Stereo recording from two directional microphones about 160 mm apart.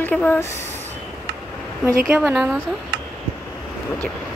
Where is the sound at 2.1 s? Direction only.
5° right (ahead or behind).